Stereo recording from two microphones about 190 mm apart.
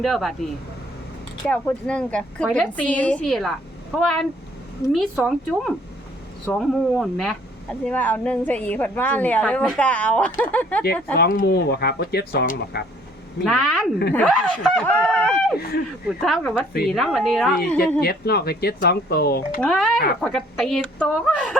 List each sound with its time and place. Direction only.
0.0 s a woman's voice: centre (ahead or behind)
1.5 s a woman's voice: 5° left (ahead or behind)
11.2 s speech: 50° left (ahead or behind)
13.4 s a woman's voice: 5° left (ahead or behind)
15.5 s speech: 55° left (ahead or behind)
16.2 s a woman's voice: centre (ahead or behind)
18.0 s speech: 55° left (ahead or behind)
19.6 s a woman's voice: 5° left (ahead or behind)